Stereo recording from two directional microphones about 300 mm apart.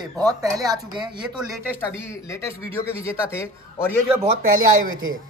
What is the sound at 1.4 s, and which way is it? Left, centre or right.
Speech, centre.